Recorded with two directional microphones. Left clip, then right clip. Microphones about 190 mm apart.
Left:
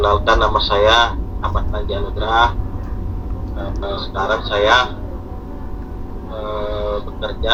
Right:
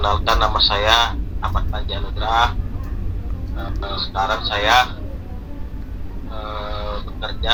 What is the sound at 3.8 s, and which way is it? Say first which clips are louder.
Speech: even; 20° left (ahead or behind).